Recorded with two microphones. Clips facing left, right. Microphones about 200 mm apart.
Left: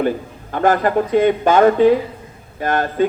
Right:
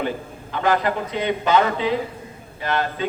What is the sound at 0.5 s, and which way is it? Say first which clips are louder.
A man's voice: left 5 dB; 50° left (ahead or behind).